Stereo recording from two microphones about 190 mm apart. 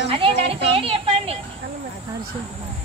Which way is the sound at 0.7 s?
30° right (ahead or behind).